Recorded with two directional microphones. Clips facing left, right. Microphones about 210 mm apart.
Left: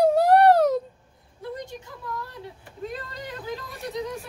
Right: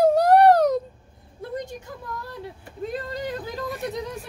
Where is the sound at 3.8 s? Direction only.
60° right (ahead or behind).